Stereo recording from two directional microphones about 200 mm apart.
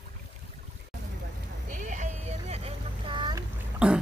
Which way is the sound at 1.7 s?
40° right (ahead or behind).